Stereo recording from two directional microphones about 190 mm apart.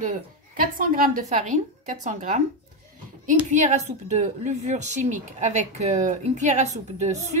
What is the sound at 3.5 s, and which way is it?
A woman's voice, 40° right (ahead or behind).